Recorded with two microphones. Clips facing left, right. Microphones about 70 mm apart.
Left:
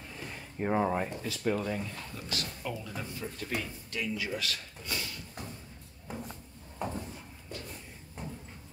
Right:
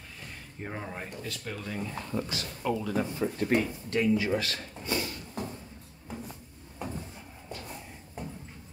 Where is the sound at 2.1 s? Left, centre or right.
Right.